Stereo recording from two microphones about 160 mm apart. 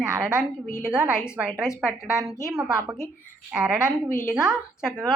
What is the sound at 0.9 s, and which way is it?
A woman's voice, 5° right (ahead or behind).